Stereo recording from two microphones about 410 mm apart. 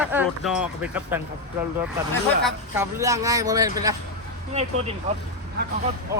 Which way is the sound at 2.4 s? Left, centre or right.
Centre.